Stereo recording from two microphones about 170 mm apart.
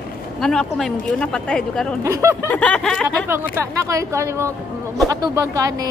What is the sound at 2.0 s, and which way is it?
Speech, 15° right (ahead or behind).